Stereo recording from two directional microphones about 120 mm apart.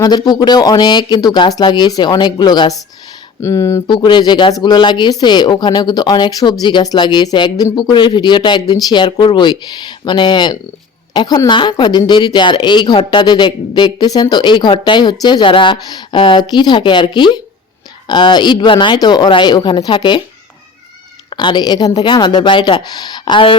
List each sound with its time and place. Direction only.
0.0 s speech: 35° left (ahead or behind)
3.4 s speech: 25° left (ahead or behind)
3.8 s a woman's voice: 40° left (ahead or behind)
21.2 s speech: 40° left (ahead or behind)